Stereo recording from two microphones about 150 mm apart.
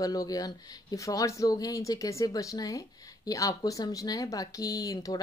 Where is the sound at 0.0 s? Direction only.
25° left (ahead or behind).